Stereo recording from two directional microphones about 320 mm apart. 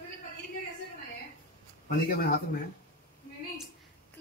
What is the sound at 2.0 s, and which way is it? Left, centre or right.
Speech, left.